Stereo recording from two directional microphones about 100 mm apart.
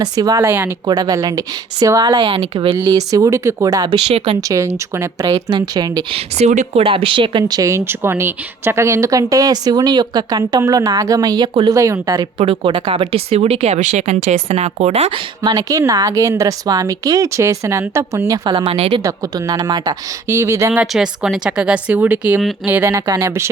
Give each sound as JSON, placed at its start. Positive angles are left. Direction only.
{"t": 0.0, "sound": "speech", "side_deg": -40}
{"t": 0.4, "sound": "speech", "side_deg": -20}
{"t": 0.9, "sound": "speech", "side_deg": -45}
{"t": 5.2, "sound": "a woman's voice", "side_deg": -50}
{"t": 6.4, "sound": "speech", "side_deg": -80}
{"t": 7.7, "sound": "speech", "side_deg": -25}
{"t": 12.4, "sound": "speech", "side_deg": -65}
{"t": 15.4, "sound": "speech", "side_deg": -40}
{"t": 18.3, "sound": "speech", "side_deg": -55}
{"t": 19.0, "sound": "speech", "side_deg": -40}
{"t": 20.9, "sound": "speech", "side_deg": -5}